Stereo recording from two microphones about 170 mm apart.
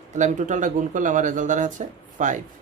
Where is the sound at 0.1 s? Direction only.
45° right (ahead or behind).